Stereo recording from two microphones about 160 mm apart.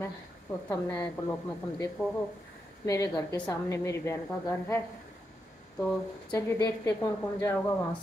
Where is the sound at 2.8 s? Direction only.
20° left (ahead or behind).